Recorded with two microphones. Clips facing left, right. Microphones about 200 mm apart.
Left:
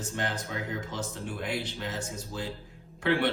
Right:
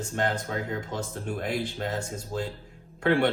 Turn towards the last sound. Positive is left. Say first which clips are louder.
# right 4 dB
turn(degrees=-50)  # may be behind; listen again after turning